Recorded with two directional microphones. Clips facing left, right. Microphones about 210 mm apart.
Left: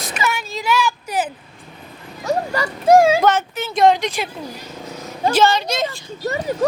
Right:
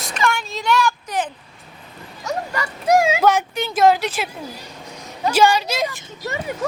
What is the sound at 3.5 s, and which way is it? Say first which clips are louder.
Speech: left 1 dB; centre (ahead or behind).